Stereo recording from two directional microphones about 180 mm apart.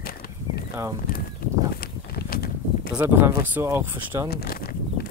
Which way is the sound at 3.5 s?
10° right (ahead or behind).